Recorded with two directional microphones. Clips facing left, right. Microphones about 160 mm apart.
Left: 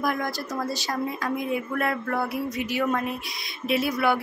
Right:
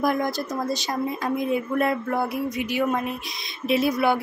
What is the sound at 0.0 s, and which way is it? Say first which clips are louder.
Speech: right 4 dB; 25° right (ahead or behind).